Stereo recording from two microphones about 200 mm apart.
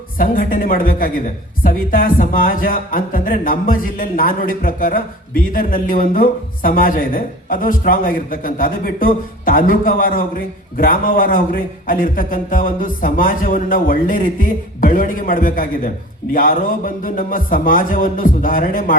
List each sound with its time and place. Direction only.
0.2 s a man's voice: 45° left (ahead or behind)